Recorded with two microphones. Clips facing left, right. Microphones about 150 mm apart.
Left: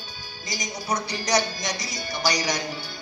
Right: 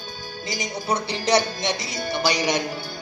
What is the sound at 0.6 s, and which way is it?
A woman's voice, 30° right (ahead or behind).